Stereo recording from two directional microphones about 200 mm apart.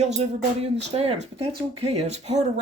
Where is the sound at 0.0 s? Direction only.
35° right (ahead or behind).